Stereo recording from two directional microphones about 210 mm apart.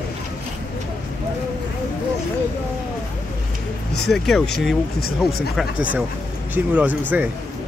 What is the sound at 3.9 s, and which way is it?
Speech, centre (ahead or behind).